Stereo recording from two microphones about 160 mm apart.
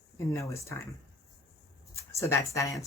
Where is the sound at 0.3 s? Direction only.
20° left (ahead or behind).